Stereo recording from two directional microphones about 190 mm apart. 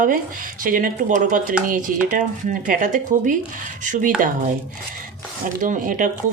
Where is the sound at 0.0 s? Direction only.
45° right (ahead or behind).